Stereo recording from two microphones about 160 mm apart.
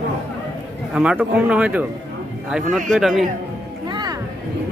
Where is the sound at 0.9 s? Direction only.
5° right (ahead or behind).